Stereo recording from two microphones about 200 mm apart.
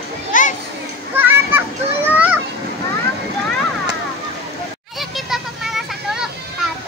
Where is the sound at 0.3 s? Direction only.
40° left (ahead or behind).